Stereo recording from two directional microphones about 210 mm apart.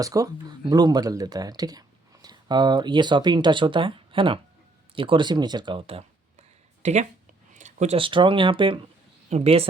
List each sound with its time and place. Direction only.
0.0 s speech: 15° right (ahead or behind)